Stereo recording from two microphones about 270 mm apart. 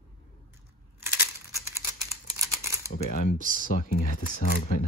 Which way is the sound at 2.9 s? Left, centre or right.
Left.